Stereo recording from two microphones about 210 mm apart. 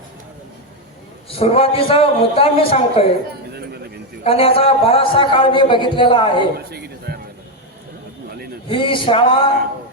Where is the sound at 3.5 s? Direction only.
50° right (ahead or behind).